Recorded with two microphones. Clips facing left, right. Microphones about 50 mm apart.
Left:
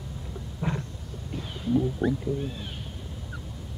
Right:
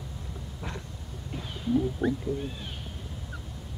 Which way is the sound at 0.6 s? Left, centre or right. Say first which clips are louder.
Left 8 dB; left.